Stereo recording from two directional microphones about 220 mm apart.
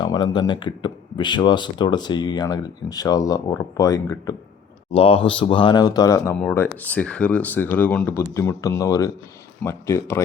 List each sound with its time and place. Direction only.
0.0 s speech: 20° left (ahead or behind)